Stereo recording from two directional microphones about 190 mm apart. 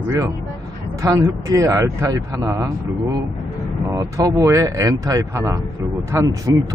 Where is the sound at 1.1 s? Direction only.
15° right (ahead or behind).